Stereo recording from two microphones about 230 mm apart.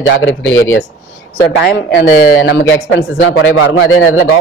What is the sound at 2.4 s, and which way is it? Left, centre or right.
Speech, left.